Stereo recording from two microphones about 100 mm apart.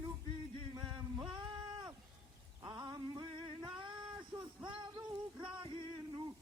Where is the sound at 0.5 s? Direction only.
55° right (ahead or behind).